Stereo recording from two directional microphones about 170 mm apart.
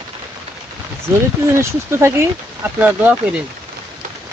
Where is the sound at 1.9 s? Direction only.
15° right (ahead or behind).